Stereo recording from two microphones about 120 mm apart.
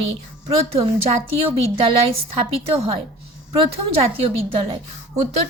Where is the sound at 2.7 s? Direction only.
55° right (ahead or behind).